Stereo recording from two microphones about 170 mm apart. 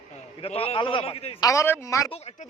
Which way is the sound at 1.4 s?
20° left (ahead or behind).